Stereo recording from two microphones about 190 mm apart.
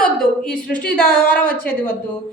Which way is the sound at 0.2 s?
5° left (ahead or behind).